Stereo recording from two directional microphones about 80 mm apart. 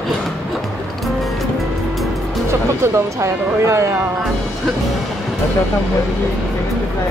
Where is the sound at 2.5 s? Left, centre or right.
Right.